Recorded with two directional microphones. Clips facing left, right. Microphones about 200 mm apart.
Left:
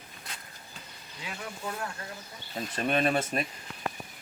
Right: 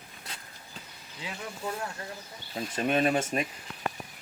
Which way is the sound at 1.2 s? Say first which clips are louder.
Right 2 dB; 25° right (ahead or behind).